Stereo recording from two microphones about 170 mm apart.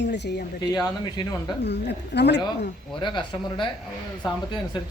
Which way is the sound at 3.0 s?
30° left (ahead or behind).